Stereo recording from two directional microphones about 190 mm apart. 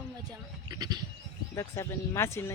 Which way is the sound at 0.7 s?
20° right (ahead or behind).